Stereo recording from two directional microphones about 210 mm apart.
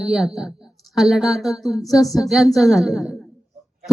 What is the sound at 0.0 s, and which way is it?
A woman's voice, centre (ahead or behind).